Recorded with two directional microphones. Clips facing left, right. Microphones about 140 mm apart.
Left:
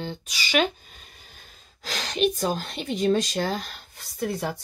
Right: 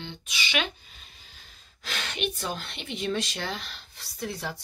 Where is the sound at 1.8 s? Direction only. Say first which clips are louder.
Left 8 dB; 35° left (ahead or behind).